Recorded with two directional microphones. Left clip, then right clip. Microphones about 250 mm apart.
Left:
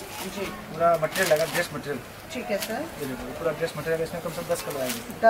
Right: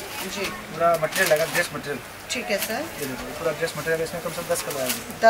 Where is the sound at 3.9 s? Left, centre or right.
Centre.